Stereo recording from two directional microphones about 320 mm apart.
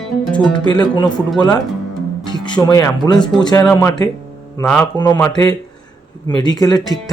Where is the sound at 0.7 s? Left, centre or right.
Centre.